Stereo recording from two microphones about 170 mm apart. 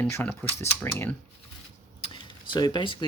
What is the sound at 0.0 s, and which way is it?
Speech, 10° left (ahead or behind).